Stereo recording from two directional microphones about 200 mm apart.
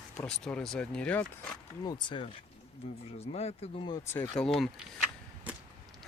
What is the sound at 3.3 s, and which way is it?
Speech, 30° left (ahead or behind).